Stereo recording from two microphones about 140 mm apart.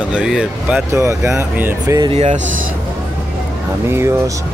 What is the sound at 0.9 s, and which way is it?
Speech, 20° right (ahead or behind).